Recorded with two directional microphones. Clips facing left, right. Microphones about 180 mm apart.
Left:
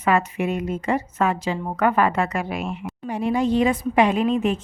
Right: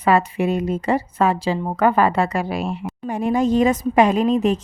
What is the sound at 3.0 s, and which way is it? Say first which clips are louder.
A woman's voice: right 2 dB; 45° right (ahead or behind).